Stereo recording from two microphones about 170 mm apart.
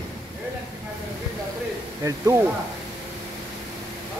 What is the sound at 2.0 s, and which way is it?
Speech, 15° right (ahead or behind).